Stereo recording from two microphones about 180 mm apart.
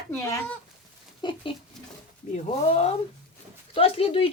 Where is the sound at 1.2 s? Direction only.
25° left (ahead or behind).